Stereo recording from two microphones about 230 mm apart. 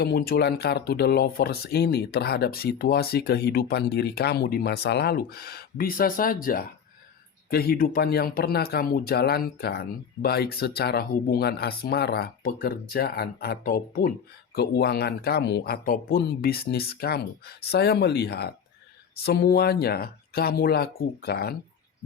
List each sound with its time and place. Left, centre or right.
0.0 s speech: left